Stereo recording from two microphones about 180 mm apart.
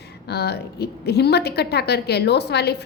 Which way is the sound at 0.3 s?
65° left (ahead or behind).